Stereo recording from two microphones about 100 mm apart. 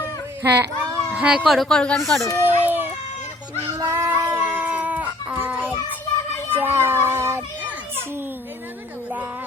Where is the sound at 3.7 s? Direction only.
30° right (ahead or behind).